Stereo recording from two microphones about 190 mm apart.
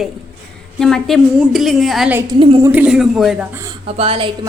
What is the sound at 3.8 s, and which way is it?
Speech, 30° right (ahead or behind).